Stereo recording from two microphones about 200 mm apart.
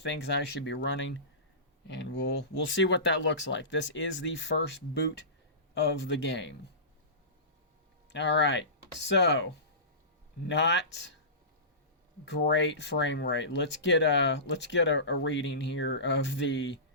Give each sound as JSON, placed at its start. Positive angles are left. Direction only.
{"t": 0.0, "sound": "speech", "side_deg": 60}
{"t": 5.7, "sound": "speech", "side_deg": 60}
{"t": 8.1, "sound": "speech", "side_deg": 60}
{"t": 10.5, "sound": "speech", "side_deg": 60}
{"t": 12.2, "sound": "speech", "side_deg": 60}